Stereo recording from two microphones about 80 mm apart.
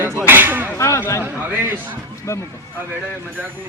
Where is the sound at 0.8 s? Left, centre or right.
Left.